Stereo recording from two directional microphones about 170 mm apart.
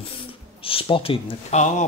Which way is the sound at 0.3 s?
30° left (ahead or behind).